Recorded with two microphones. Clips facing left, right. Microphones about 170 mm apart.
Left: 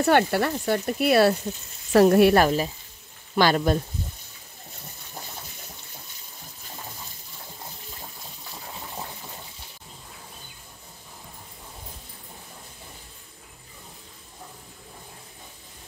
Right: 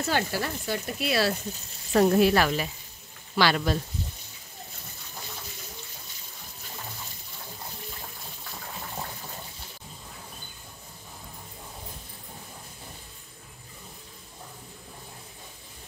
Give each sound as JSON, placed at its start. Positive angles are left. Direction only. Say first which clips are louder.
{"t": 0.0, "sound": "frying", "louder": "left 8 dB", "side_deg": 60}
{"t": 1.9, "sound": "frying", "louder": "left 4 dB", "side_deg": 70}
{"t": 2.4, "sound": "speech", "louder": "left 5 dB", "side_deg": 40}